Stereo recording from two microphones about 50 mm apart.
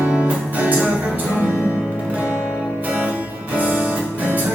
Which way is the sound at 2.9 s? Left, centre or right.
Right.